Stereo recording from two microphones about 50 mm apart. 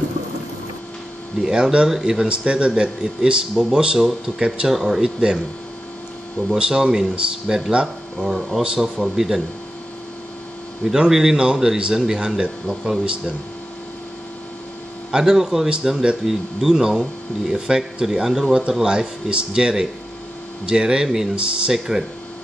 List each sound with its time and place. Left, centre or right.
1.4 s speech: centre
6.6 s speech: centre
10.8 s speech: centre
15.0 s speech: centre